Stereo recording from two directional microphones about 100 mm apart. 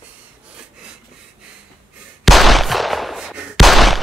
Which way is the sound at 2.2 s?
Centre (ahead or behind).